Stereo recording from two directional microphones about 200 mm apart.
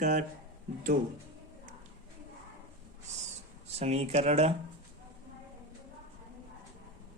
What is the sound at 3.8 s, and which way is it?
Speech, 35° right (ahead or behind).